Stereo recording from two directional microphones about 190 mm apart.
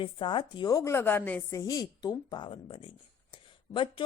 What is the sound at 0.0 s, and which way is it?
Speech, 25° left (ahead or behind).